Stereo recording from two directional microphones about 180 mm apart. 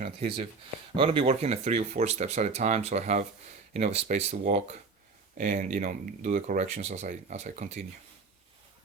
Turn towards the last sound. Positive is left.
turn(degrees=-40)  # may be behind; listen again after turning